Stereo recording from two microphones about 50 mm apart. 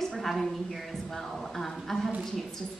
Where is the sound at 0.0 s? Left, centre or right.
Centre.